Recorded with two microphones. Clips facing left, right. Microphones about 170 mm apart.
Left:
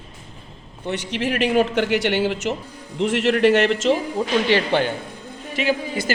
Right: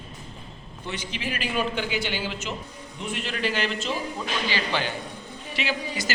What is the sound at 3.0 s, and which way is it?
Speech, 90° left.